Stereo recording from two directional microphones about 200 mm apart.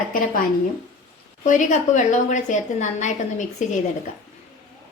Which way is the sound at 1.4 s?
40° left (ahead or behind).